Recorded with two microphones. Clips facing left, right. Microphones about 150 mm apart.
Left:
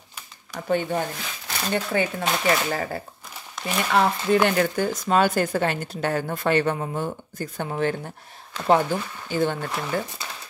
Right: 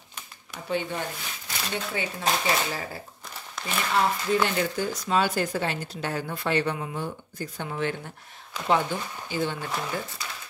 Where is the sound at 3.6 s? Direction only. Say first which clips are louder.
Left 5 dB; centre (ahead or behind).